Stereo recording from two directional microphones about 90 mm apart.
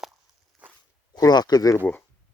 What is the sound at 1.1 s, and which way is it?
Speech, 45° left (ahead or behind).